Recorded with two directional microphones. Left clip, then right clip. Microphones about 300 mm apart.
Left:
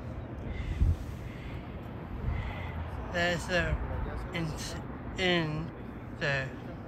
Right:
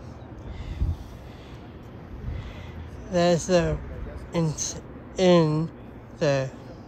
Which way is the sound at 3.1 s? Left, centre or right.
Centre.